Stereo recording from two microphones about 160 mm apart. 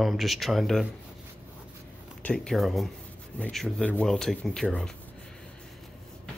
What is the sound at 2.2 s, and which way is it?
Speech, 5° left (ahead or behind).